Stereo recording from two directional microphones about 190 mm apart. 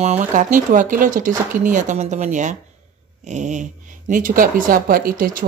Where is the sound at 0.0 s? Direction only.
40° right (ahead or behind).